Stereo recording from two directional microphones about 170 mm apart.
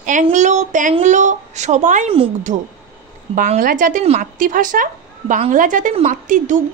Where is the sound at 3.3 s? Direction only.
50° right (ahead or behind).